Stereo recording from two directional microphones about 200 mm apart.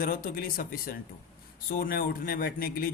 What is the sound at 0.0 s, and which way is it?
Speech, 50° left (ahead or behind).